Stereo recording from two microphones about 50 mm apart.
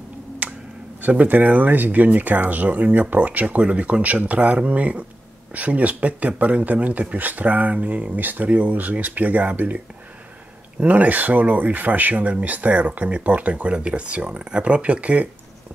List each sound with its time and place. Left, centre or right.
0.4 s a sound: right
1.0 s speech: right
10.8 s speech: right